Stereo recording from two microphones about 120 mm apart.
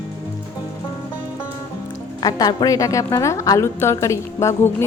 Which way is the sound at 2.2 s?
35° left (ahead or behind).